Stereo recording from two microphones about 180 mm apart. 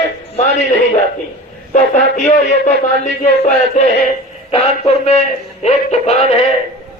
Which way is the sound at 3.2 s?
40° left (ahead or behind).